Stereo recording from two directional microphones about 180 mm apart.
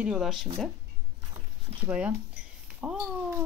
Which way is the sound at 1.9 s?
5° right (ahead or behind).